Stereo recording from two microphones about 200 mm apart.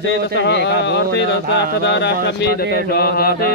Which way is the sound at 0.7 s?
60° left (ahead or behind).